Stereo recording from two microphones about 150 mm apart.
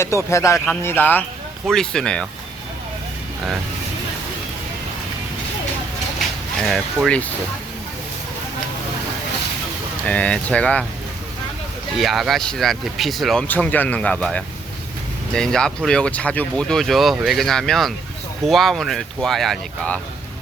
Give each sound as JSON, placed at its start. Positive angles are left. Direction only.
{"t": 0.3, "sound": "speech", "side_deg": 20}
{"t": 6.1, "sound": "a sound", "side_deg": 0}
{"t": 10.1, "sound": "speech", "side_deg": 10}
{"t": 11.9, "sound": "speech", "side_deg": 0}
{"t": 13.5, "sound": "speech", "side_deg": 10}